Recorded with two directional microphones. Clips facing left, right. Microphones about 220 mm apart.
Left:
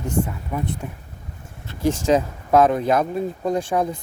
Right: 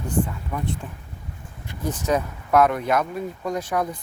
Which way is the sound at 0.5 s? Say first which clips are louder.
Left 3 dB; 15° left (ahead or behind).